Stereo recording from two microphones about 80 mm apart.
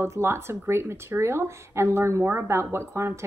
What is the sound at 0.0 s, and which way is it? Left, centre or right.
Speech, right.